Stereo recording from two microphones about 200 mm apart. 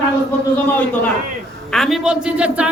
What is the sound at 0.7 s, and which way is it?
A man's voice, 5° left (ahead or behind).